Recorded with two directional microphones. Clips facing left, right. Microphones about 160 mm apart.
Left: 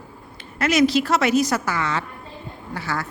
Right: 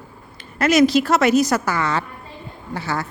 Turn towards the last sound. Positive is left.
turn(degrees=-25)  # may be behind; listen again after turning